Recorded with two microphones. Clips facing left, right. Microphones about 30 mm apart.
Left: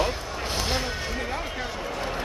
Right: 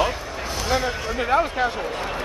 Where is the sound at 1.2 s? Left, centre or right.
Right.